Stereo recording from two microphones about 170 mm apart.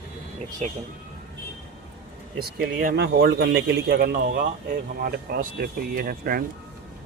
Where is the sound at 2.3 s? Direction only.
60° right (ahead or behind).